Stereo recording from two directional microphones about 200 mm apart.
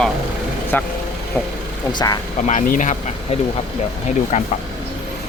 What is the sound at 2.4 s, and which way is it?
Speech, 35° left (ahead or behind).